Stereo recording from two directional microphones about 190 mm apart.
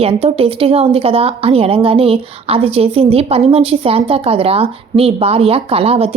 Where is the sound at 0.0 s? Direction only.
30° right (ahead or behind).